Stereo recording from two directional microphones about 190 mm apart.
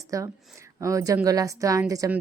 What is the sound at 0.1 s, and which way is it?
A woman's voice, 15° right (ahead or behind).